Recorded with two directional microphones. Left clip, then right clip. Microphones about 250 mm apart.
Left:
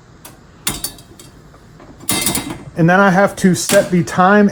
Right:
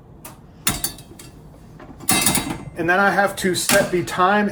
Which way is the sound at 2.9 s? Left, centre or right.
Left.